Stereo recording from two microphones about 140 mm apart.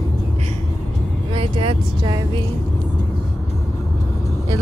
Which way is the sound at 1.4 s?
40° right (ahead or behind).